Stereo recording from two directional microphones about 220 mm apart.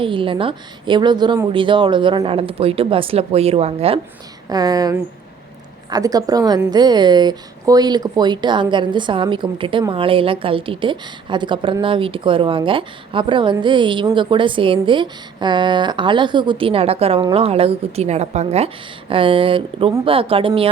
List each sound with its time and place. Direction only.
0.0 s a woman's voice: 25° right (ahead or behind)